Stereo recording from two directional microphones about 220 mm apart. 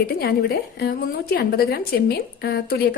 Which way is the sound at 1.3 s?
45° left (ahead or behind).